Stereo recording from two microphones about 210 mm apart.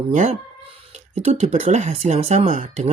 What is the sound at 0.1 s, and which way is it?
Speech, 35° right (ahead or behind).